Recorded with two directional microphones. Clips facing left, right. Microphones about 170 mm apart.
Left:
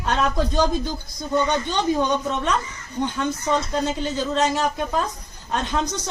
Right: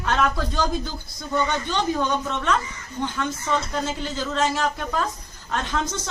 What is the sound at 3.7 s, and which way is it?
Speech, 20° left (ahead or behind).